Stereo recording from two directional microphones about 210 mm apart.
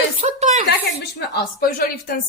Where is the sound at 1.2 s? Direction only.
50° left (ahead or behind).